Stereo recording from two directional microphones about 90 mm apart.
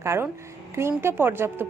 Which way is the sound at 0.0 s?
30° right (ahead or behind).